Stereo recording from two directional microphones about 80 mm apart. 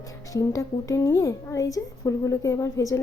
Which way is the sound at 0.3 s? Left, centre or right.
Left.